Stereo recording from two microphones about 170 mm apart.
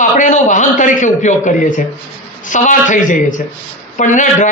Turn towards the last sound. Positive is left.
turn(degrees=45)  # may be behind; listen again after turning